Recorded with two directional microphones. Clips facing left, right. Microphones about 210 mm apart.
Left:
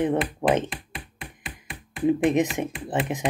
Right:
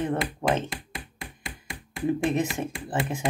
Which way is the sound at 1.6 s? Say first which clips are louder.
Left 4 dB; 20° left (ahead or behind).